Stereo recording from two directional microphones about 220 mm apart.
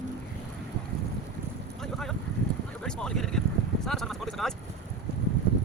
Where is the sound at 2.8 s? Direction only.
5° left (ahead or behind).